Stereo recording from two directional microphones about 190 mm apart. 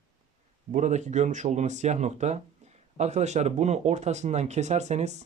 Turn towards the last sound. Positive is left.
turn(degrees=-35)  # may be behind; listen again after turning